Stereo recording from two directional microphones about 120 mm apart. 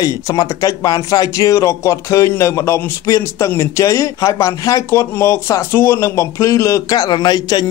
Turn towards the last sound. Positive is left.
turn(degrees=35)  # may be behind; listen again after turning